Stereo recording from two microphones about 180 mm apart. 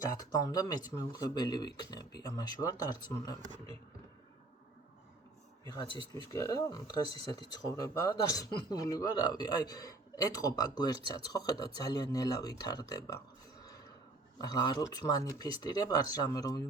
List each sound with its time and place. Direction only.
0.0 s speech: 20° left (ahead or behind)
6.3 s speech: 20° left (ahead or behind)
14.3 s speech: 25° left (ahead or behind)